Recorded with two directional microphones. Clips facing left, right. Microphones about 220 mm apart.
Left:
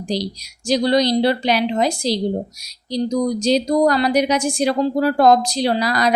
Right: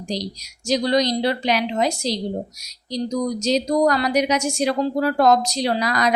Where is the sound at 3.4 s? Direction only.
30° left (ahead or behind).